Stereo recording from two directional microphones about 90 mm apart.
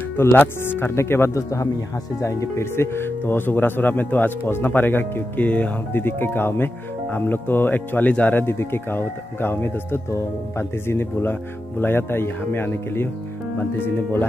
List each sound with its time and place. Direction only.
0.2 s speech: 25° left (ahead or behind)